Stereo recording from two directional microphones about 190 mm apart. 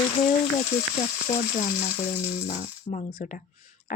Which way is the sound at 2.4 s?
40° left (ahead or behind).